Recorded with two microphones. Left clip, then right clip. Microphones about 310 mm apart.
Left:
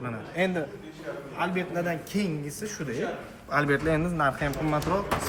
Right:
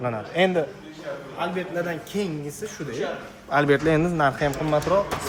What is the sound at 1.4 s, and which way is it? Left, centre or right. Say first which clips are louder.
Speech: right 2 dB; centre.